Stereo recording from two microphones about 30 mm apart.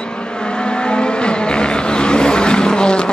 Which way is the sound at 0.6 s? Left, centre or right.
Left.